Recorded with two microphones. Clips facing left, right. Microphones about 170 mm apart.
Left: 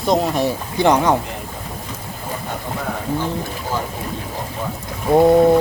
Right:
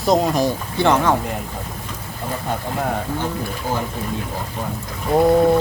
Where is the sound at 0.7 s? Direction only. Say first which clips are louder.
Left 2 dB; 15° left (ahead or behind).